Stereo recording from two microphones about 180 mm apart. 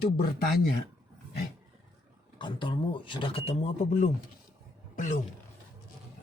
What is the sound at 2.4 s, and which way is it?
Speech, 25° left (ahead or behind).